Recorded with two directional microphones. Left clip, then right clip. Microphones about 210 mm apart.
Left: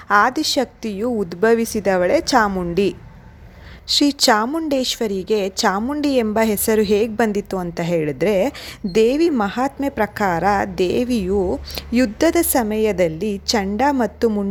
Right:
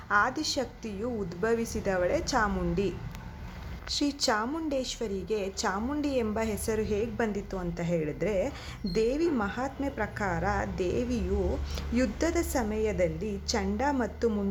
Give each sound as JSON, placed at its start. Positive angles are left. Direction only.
{"t": 0.1, "sound": "a woman's voice", "side_deg": 35}